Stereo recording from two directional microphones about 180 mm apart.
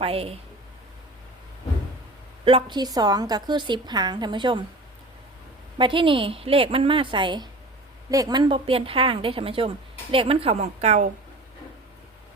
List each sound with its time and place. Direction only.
0.0 s a woman's voice: 30° right (ahead or behind)
2.4 s a woman's voice: 30° right (ahead or behind)
5.7 s a woman's voice: 30° right (ahead or behind)